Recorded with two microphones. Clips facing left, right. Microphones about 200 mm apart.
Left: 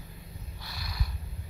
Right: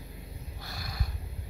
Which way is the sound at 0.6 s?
50° right (ahead or behind).